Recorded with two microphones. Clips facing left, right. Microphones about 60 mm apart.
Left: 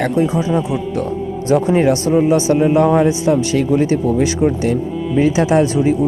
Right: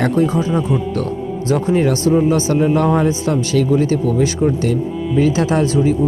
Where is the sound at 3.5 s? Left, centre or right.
Left.